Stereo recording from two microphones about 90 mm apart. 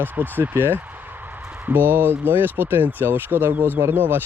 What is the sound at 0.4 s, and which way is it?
Speech, 25° right (ahead or behind).